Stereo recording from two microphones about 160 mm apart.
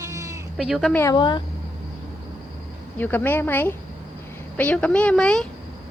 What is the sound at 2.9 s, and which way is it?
A woman's voice, 10° left (ahead or behind).